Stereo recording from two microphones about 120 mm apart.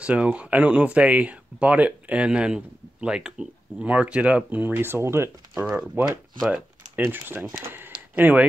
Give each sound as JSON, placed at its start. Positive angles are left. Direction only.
{"t": 0.0, "sound": "speech", "side_deg": -10}
{"t": 5.5, "sound": "speech", "side_deg": -10}